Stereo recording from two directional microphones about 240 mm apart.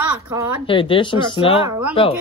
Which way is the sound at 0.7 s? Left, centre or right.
Left.